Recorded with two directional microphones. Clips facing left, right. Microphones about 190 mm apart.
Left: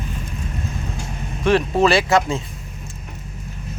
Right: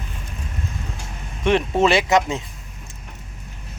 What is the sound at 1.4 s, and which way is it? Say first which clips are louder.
Speech: left 1 dB; 25° right (ahead or behind).